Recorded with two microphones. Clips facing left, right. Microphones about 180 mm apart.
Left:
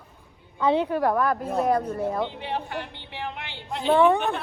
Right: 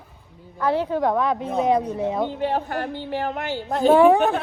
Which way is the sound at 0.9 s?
5° left (ahead or behind).